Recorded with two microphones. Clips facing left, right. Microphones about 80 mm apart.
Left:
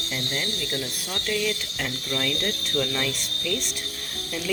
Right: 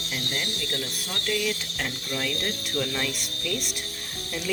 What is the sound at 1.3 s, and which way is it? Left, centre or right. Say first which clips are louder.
Speech: left 1 dB; centre.